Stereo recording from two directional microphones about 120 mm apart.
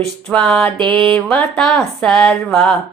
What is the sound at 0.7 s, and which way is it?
Speech, 45° right (ahead or behind).